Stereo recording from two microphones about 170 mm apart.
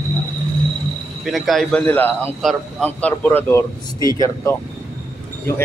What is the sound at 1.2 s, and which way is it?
Speech, centre (ahead or behind).